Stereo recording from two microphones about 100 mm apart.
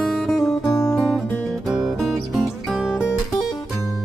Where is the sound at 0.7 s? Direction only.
35° left (ahead or behind).